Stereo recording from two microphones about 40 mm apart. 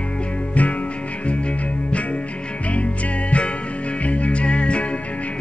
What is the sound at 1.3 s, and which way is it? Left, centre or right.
Music, left.